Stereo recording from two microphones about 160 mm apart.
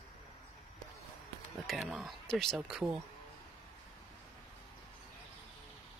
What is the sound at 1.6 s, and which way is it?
Speech, centre (ahead or behind).